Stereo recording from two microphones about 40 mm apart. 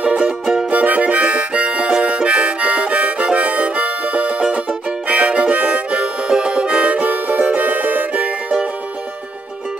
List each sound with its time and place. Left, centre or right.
0.0 s music: right
0.7 s harmonica: right
6.4 s music: right
7.1 s music: right
8.1 s music: right